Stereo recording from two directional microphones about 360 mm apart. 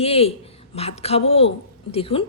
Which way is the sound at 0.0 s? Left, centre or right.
Centre.